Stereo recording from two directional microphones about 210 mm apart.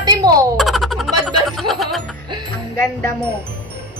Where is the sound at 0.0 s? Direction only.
20° right (ahead or behind).